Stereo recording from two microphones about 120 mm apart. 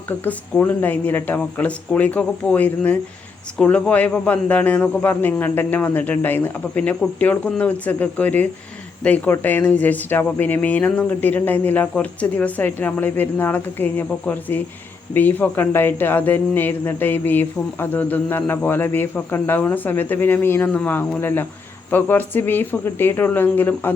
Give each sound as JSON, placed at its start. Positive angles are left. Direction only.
{"t": 0.3, "sound": "speech", "side_deg": 15}